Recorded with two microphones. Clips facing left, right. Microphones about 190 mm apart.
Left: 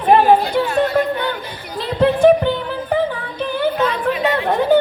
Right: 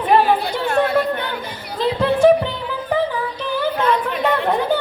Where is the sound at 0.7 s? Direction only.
55° right (ahead or behind).